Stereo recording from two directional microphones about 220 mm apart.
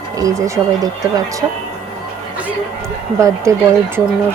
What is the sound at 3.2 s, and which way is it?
Speech, 15° right (ahead or behind).